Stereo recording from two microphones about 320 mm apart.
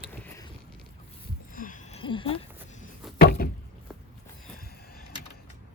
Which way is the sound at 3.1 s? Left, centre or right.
Left.